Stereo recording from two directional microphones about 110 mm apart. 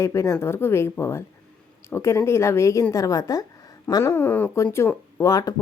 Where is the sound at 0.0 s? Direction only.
25° left (ahead or behind).